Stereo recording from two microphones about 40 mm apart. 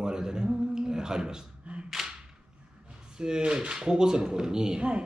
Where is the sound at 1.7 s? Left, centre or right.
Right.